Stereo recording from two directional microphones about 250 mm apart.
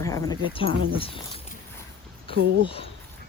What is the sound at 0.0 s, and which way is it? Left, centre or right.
Speech, centre.